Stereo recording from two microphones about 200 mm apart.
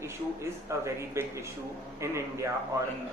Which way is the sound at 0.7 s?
15° right (ahead or behind).